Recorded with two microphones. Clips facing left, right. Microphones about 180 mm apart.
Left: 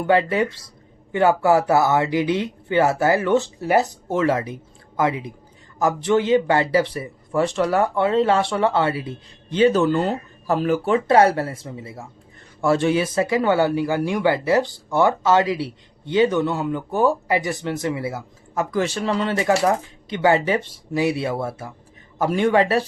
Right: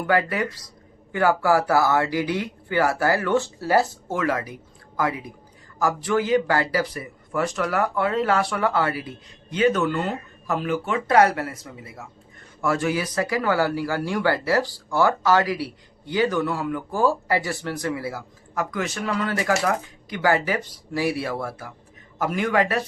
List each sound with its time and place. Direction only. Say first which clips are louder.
0.0 s speech: left 4 dB; 25° left (ahead or behind)